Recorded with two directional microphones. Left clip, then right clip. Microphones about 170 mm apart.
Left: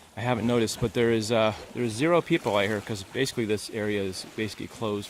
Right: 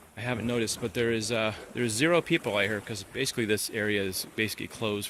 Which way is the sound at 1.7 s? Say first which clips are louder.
Left 1 dB; 15° left (ahead or behind).